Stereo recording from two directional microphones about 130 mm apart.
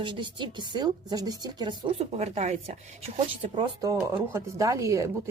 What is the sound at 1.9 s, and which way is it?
Speech, 55° right (ahead or behind).